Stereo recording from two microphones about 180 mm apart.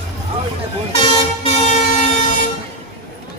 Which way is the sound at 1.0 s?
35° left (ahead or behind).